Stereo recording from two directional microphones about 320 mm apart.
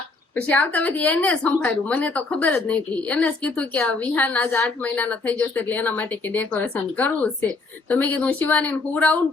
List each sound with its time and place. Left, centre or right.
0.3 s a woman's voice: centre